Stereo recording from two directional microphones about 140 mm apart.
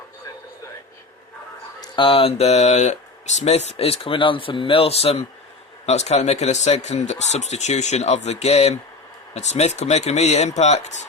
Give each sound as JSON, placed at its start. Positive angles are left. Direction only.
{"t": 1.8, "sound": "speech", "side_deg": 40}